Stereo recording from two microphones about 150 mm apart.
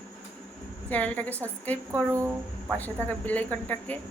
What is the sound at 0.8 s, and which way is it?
Speech, 10° left (ahead or behind).